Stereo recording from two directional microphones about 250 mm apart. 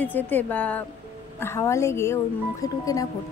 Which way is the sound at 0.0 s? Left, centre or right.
Centre.